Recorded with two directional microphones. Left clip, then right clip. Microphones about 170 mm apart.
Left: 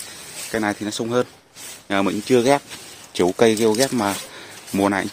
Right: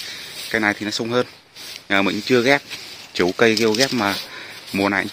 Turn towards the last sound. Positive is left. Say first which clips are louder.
# even
turn(degrees=20)  # may be behind; listen again after turning